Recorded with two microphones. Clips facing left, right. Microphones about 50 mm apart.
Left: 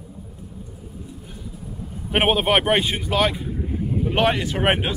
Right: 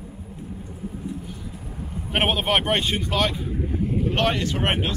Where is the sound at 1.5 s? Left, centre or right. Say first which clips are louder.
Left 1 dB; right.